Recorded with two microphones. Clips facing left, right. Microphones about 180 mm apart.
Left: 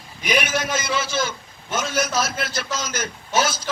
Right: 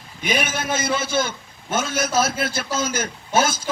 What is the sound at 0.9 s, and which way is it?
A man's voice, 55° right (ahead or behind).